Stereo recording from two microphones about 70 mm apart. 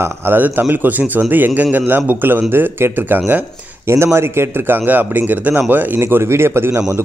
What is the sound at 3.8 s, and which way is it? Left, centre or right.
A man's voice, right.